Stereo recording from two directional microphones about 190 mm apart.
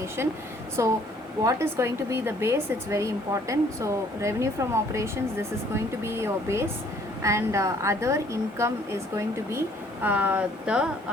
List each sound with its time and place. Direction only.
0.8 s speech: 15° right (ahead or behind)